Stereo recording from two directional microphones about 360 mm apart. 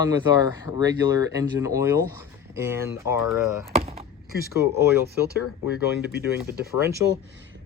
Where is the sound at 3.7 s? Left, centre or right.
Centre.